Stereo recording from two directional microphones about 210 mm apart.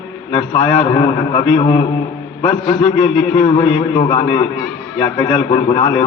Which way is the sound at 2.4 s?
20° left (ahead or behind).